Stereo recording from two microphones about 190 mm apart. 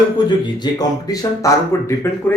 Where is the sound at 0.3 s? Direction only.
20° left (ahead or behind).